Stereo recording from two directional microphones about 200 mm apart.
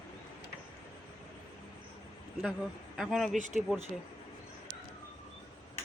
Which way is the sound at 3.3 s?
40° right (ahead or behind).